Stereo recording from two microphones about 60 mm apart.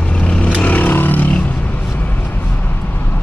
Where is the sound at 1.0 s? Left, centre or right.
Left.